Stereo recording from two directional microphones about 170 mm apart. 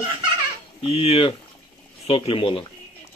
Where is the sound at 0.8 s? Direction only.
35° left (ahead or behind).